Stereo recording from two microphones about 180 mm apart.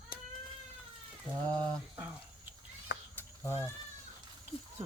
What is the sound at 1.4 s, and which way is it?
Speech, 10° left (ahead or behind).